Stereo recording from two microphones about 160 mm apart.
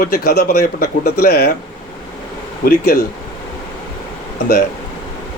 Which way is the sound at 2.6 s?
65° left (ahead or behind).